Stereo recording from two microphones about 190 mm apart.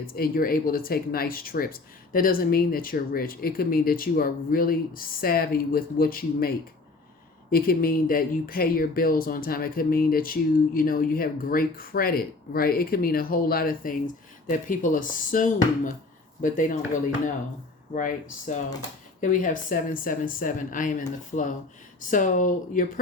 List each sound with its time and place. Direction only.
0.0 s speech: 50° left (ahead or behind)
7.5 s speech: 50° left (ahead or behind)